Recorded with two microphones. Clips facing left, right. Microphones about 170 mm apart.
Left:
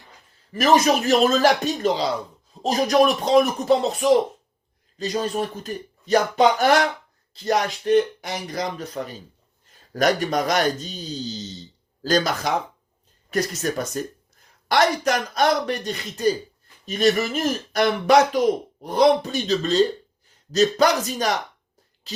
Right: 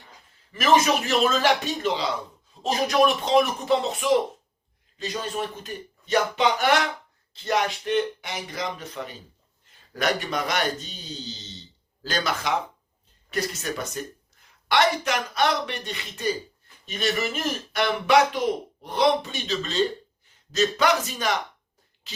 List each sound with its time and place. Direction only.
0.5 s speech: 40° left (ahead or behind)